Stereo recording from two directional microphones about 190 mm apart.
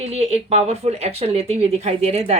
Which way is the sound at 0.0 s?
35° right (ahead or behind).